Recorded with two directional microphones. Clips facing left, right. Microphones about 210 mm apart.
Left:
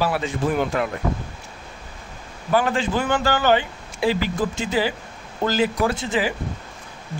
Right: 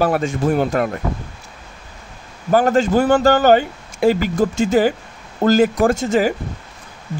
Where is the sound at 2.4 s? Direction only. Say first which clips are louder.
Right 6 dB; 40° right (ahead or behind).